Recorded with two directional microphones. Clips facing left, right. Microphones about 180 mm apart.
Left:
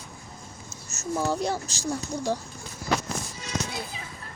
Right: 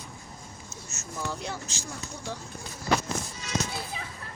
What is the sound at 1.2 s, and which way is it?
A woman's voice, 35° left (ahead or behind).